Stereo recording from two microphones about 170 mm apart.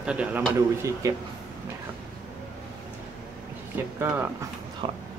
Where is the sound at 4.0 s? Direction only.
15° right (ahead or behind).